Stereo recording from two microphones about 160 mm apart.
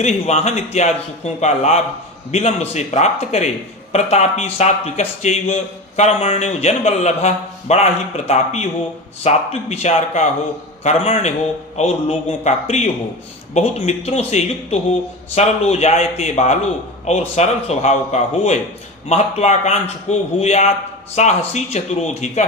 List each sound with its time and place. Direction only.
0.0 s a man's voice: 40° left (ahead or behind)